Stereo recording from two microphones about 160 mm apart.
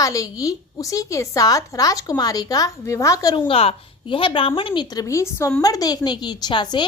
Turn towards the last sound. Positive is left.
turn(degrees=30)  # may be behind; listen again after turning